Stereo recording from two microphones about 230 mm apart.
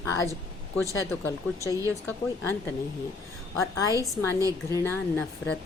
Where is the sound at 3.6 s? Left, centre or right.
Centre.